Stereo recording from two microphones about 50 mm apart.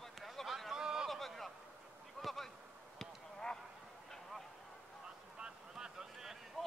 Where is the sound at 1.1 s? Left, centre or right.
Centre.